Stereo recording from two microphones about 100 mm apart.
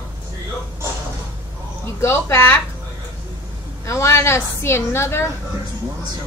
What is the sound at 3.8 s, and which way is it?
A woman's voice, 30° left (ahead or behind).